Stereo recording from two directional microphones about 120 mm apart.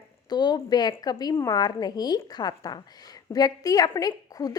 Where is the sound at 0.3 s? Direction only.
35° left (ahead or behind).